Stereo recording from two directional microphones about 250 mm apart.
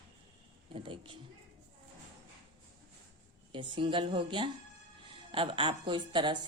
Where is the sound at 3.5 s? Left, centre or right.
Centre.